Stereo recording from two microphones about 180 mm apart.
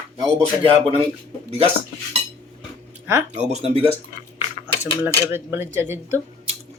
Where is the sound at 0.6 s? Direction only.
30° right (ahead or behind).